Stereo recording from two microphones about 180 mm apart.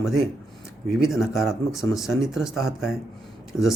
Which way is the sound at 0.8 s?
Centre (ahead or behind).